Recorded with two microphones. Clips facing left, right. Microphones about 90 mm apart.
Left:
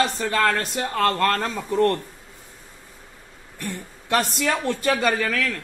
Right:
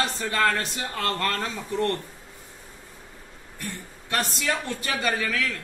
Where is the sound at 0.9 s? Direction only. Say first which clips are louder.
Left 7 dB; 50° left (ahead or behind).